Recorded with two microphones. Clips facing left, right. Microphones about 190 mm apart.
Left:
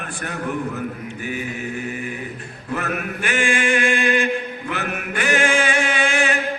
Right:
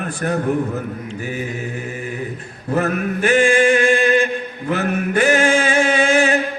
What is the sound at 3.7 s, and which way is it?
Chant, 40° right (ahead or behind).